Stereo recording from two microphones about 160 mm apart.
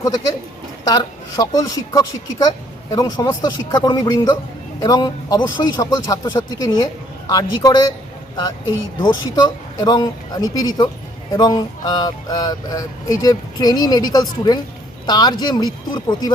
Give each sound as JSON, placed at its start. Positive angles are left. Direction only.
{"t": 0.9, "sound": "speech", "side_deg": 20}
{"t": 9.0, "sound": "speech", "side_deg": 25}